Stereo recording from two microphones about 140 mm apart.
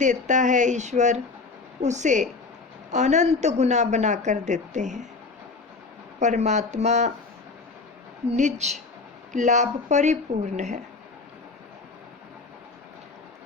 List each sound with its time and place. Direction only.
0.0 s a woman's voice: 60° right (ahead or behind)
6.1 s a woman's voice: 55° right (ahead or behind)
8.3 s a woman's voice: 55° right (ahead or behind)